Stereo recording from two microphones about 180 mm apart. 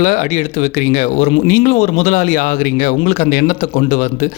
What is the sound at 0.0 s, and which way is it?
Speech, 40° left (ahead or behind).